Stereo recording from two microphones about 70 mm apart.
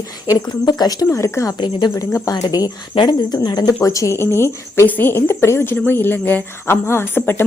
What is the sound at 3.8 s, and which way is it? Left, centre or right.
Speech, left.